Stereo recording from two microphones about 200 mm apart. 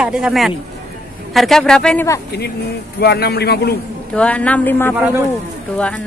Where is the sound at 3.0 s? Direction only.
50° left (ahead or behind).